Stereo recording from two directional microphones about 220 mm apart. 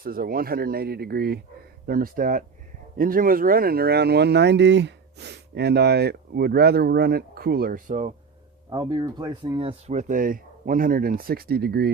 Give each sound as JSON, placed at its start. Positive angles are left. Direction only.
{"t": 0.0, "sound": "speech", "side_deg": -40}
{"t": 8.7, "sound": "speech", "side_deg": -20}